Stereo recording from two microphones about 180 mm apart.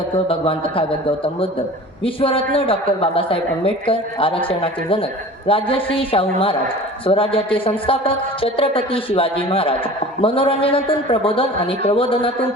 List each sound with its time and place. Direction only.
0.3 s a man's voice: 30° left (ahead or behind)